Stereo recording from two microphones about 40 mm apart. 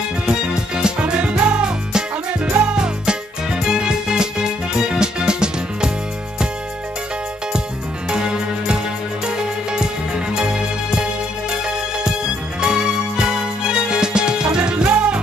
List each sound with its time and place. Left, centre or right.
0.3 s music: centre
8.1 s music: right
12.5 s music: centre